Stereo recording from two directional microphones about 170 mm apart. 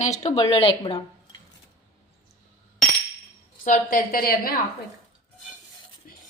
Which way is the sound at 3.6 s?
50° left (ahead or behind).